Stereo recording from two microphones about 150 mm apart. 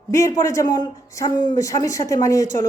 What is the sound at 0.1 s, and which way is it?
Speech, 20° left (ahead or behind).